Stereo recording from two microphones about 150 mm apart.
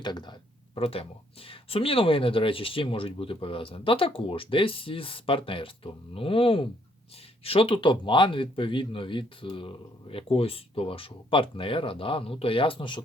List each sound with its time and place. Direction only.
0.0 s speech: 30° left (ahead or behind)
0.8 s speech: 40° left (ahead or behind)